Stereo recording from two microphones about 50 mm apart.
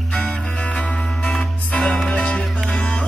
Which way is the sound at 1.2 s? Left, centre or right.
Centre.